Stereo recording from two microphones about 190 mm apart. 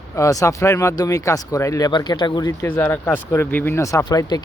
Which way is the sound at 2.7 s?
10° left (ahead or behind).